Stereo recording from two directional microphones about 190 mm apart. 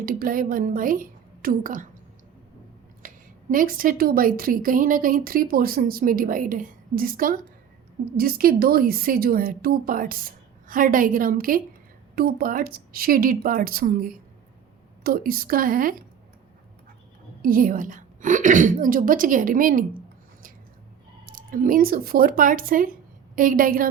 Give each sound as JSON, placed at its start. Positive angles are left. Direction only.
{"t": 0.0, "sound": "a woman's voice", "side_deg": -50}
{"t": 3.0, "sound": "a sound", "side_deg": -45}
{"t": 3.5, "sound": "a woman's voice", "side_deg": -45}
{"t": 17.4, "sound": "a woman's voice", "side_deg": -50}
{"t": 21.2, "sound": "a woman's voice", "side_deg": -45}